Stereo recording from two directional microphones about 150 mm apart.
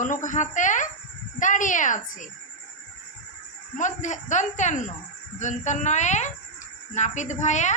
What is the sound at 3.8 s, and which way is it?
A woman's voice, 55° left (ahead or behind).